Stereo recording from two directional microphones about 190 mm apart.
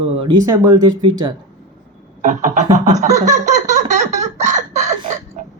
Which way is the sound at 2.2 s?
40° right (ahead or behind).